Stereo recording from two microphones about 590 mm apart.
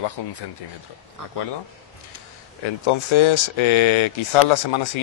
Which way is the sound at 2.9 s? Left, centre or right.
Left.